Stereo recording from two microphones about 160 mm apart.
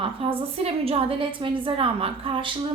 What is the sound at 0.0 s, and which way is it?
A woman's voice, 35° right (ahead or behind).